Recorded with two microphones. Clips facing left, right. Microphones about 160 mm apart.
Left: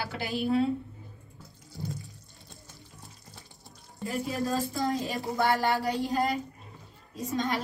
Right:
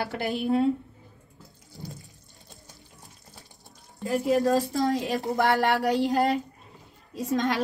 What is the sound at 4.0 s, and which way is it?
Speech, 70° right (ahead or behind).